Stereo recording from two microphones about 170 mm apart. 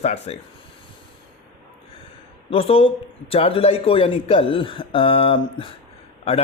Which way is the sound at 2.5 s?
35° left (ahead or behind).